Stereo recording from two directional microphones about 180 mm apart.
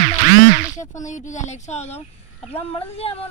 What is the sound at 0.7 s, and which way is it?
Speech, 45° left (ahead or behind).